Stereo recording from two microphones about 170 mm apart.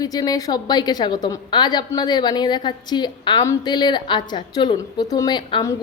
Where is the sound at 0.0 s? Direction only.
20° left (ahead or behind).